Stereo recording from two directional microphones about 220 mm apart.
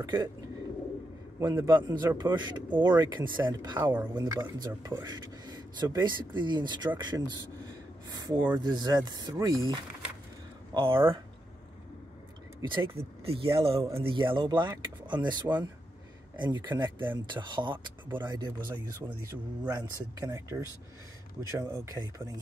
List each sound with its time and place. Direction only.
0.0 s speech: 20° right (ahead or behind)
1.4 s speech: 15° right (ahead or behind)
10.7 s speech: 25° right (ahead or behind)
12.6 s speech: 20° right (ahead or behind)
13.7 s speech: 15° right (ahead or behind)
15.4 s speech: 10° right (ahead or behind)
16.3 s speech: 20° right (ahead or behind)
19.8 s speech: 15° right (ahead or behind)